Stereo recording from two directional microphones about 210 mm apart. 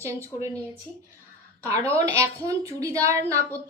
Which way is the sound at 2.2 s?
15° right (ahead or behind).